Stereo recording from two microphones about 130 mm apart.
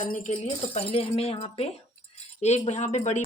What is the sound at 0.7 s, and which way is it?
A woman's voice, 50° left (ahead or behind).